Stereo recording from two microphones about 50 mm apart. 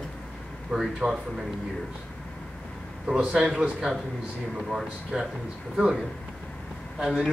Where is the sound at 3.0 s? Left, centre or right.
Centre.